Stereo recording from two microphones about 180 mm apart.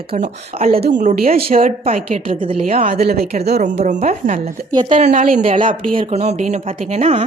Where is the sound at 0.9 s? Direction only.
45° right (ahead or behind).